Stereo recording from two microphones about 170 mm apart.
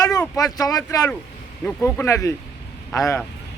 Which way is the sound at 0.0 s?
20° left (ahead or behind).